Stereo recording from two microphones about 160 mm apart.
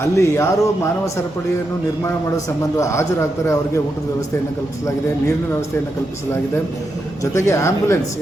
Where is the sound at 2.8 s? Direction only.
20° left (ahead or behind).